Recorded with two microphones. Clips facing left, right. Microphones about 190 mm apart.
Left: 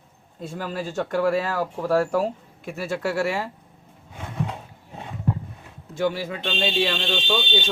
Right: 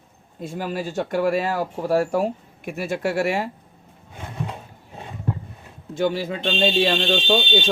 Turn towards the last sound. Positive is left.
turn(degrees=-35)  # may be behind; listen again after turning